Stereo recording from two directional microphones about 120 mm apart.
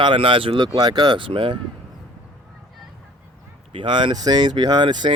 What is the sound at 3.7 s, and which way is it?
Speech, 40° right (ahead or behind).